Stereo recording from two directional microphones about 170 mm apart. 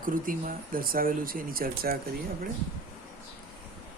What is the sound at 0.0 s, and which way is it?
Speech, 55° right (ahead or behind).